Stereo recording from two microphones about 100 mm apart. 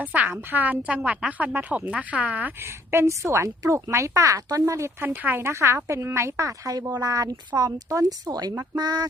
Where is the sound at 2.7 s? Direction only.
25° right (ahead or behind).